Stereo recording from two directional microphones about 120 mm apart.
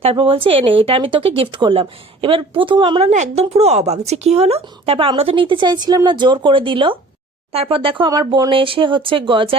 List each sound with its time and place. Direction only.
0.0 s a woman's voice: 50° right (ahead or behind)
3.1 s a woman's voice: 75° right (ahead or behind)
3.6 s a woman's voice: 65° right (ahead or behind); by 9.6 s 45° right (ahead or behind)